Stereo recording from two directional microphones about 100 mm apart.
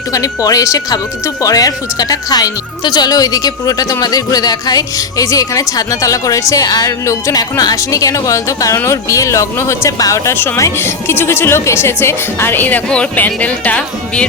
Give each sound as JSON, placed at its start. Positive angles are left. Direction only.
{"t": 0.1, "sound": "speech", "side_deg": 35}